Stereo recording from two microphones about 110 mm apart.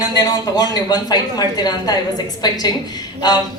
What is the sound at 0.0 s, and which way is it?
A woman's voice, 35° left (ahead or behind).